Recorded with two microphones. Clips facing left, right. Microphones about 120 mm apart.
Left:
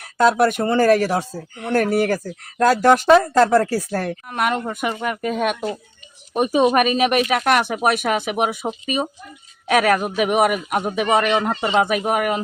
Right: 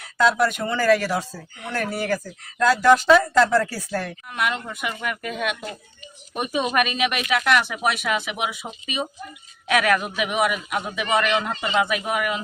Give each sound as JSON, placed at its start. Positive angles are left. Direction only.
{"t": 0.0, "sound": "speech", "side_deg": 50}
{"t": 3.1, "sound": "speech", "side_deg": 40}